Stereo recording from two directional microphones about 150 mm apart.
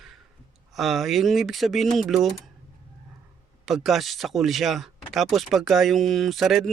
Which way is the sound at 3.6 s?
Centre (ahead or behind).